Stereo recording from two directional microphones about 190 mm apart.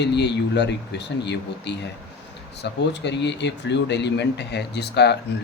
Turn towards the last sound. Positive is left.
turn(degrees=60)  # may be behind; listen again after turning